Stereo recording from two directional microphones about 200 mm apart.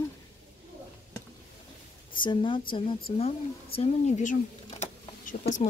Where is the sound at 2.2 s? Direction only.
25° left (ahead or behind).